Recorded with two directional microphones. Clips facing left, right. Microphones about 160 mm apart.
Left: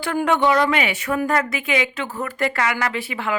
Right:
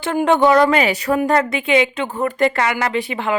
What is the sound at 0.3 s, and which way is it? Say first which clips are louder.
A woman's voice: right 6 dB; 40° right (ahead or behind).